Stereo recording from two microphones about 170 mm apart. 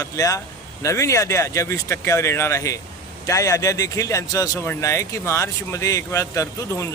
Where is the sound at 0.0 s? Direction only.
20° left (ahead or behind).